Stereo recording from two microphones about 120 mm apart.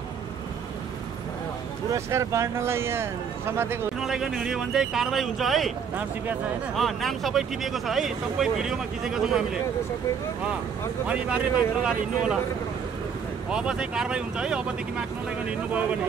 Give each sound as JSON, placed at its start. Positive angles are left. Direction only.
{"t": 1.9, "sound": "speech", "side_deg": -25}
{"t": 4.0, "sound": "speech", "side_deg": -5}
{"t": 6.8, "sound": "speech", "side_deg": 0}
{"t": 11.1, "sound": "speech", "side_deg": -10}
{"t": 13.5, "sound": "speech", "side_deg": -5}